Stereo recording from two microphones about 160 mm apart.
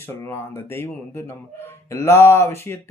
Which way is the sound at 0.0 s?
15° left (ahead or behind).